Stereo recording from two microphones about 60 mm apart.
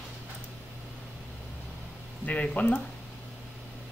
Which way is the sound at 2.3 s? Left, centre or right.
Left.